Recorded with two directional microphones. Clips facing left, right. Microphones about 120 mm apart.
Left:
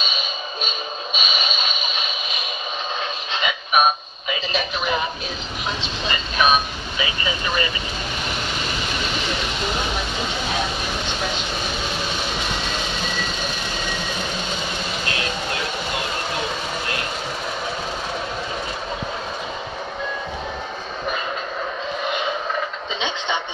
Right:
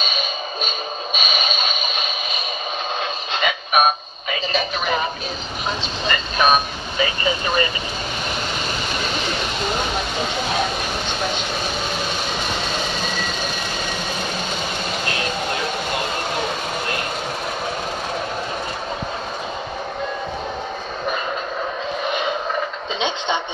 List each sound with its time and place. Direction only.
0.0 s music: 45° right (ahead or behind)
3.3 s music: 45° right (ahead or behind)
5.7 s speech: 45° right (ahead or behind)
22.9 s a sound: 15° right (ahead or behind)